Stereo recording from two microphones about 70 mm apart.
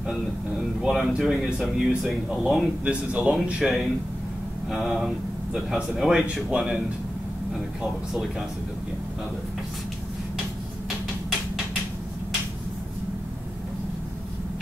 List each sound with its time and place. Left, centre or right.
0.6 s speech: centre
2.8 s speech: centre
3.6 s speech: centre